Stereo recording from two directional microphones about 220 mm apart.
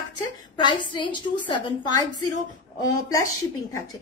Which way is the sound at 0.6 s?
20° left (ahead or behind).